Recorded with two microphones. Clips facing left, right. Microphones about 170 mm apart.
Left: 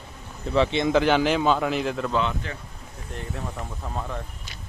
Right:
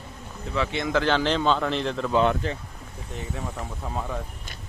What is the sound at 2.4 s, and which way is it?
Speech, 35° right (ahead or behind).